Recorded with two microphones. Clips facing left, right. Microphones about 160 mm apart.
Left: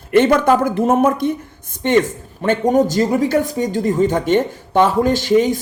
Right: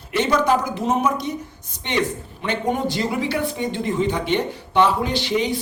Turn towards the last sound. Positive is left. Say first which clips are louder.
# left 7 dB
turn(degrees=45)  # may be behind; listen again after turning